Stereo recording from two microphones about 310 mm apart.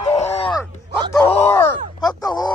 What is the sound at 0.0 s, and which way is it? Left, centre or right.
Groan, left.